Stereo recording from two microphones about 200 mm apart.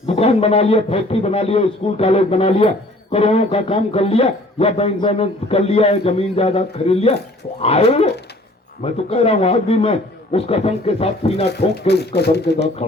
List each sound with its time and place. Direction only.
0.1 s a man's voice: 30° left (ahead or behind)
11.7 s speech: 55° left (ahead or behind)